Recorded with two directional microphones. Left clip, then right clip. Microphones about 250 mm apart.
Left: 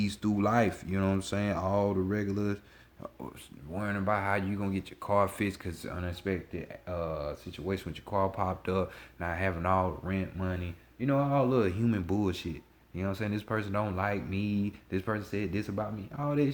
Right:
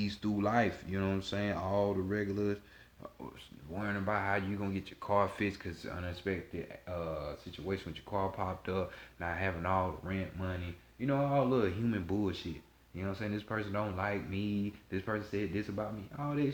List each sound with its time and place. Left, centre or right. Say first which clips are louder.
0.0 s speech: left 4 dB; left
3.8 s speech: left 4 dB; left